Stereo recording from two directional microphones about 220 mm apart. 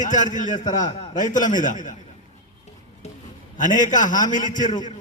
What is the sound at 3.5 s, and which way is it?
A man's voice, 35° left (ahead or behind).